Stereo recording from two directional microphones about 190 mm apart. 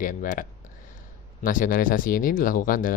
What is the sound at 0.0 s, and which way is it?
Speech, 45° left (ahead or behind).